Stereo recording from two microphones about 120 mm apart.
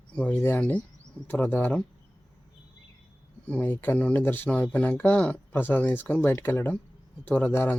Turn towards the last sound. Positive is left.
turn(degrees=15)  # may be behind; listen again after turning